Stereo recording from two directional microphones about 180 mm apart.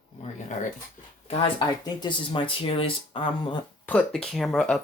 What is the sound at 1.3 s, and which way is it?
Speech, 30° left (ahead or behind).